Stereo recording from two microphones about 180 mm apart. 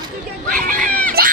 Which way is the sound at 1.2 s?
55° right (ahead or behind).